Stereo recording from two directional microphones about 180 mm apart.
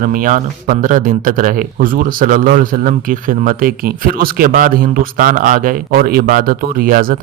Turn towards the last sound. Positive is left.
turn(degrees=-50)  # may be behind; listen again after turning